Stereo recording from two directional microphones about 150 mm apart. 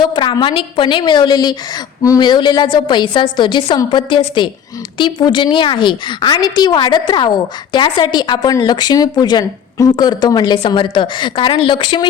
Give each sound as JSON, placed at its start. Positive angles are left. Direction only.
{"t": 0.1, "sound": "a woman's voice", "side_deg": 30}